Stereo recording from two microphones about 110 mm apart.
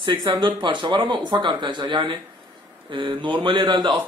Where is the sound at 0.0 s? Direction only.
45° right (ahead or behind).